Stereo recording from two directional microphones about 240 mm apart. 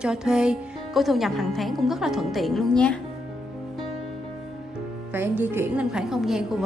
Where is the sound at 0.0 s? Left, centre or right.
Centre.